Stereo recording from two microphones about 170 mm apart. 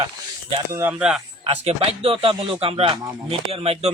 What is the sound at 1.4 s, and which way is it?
Speech, 35° right (ahead or behind).